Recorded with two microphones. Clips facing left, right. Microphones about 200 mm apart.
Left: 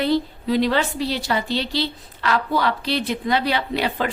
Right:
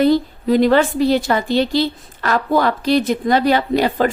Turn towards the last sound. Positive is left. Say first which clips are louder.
# right 7 dB
turn(degrees=-45)  # may be behind; listen again after turning